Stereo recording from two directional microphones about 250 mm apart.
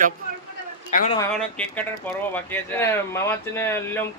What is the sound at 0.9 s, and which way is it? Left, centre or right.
Speech, left.